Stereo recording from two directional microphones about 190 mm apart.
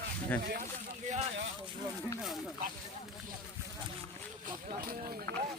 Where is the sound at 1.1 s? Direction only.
40° right (ahead or behind).